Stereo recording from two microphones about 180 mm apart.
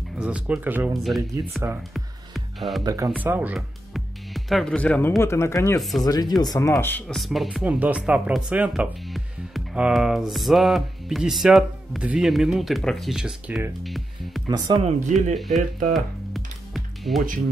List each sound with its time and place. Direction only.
0.2 s speech: 5° right (ahead or behind)
2.0 s music: centre (ahead or behind)
2.8 s speech: 20° right (ahead or behind)
3.1 s speech: 10° right (ahead or behind); by 5.8 s 15° left (ahead or behind)
5.8 s speech: centre (ahead or behind)
6.0 s speech: 20° left (ahead or behind)
7.2 s speech: centre (ahead or behind)
14.8 s speech: 35° right (ahead or behind)
15.3 s speech: centre (ahead or behind)
15.9 s music: centre (ahead or behind)